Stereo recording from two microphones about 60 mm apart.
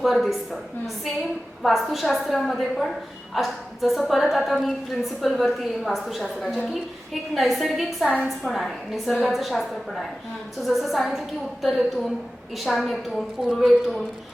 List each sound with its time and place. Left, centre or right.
0.0 s a woman's voice: centre
1.6 s a woman's voice: centre